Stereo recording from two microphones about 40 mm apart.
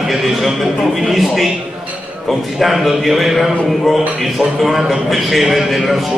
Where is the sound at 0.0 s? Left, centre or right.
Centre.